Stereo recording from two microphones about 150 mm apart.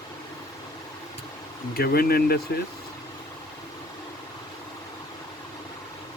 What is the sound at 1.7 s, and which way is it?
Speech, 90° left.